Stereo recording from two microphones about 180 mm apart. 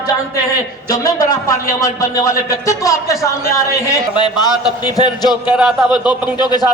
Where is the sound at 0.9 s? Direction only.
20° left (ahead or behind).